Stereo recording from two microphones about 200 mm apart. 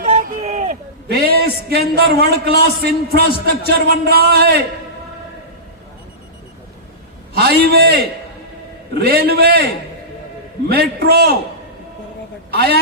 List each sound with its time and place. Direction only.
0.0 s a man's voice: 35° right (ahead or behind); by 4.6 s 50° right (ahead or behind)
7.3 s a man's voice: 50° right (ahead or behind)
10.7 s a man's voice: 50° right (ahead or behind)
12.5 s a woman's voice: 55° right (ahead or behind)